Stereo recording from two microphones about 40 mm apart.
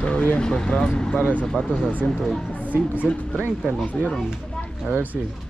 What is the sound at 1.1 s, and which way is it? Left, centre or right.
Speech, left.